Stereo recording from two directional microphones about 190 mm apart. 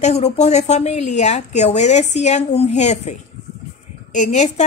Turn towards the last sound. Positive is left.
turn(degrees=35)  # may be behind; listen again after turning